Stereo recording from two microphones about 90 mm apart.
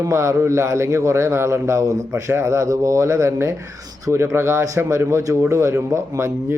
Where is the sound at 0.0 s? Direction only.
35° right (ahead or behind).